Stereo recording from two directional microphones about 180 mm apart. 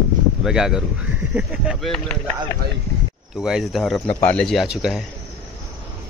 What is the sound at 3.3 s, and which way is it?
Speech, centre (ahead or behind).